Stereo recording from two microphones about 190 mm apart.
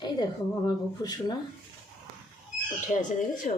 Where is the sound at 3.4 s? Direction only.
40° left (ahead or behind).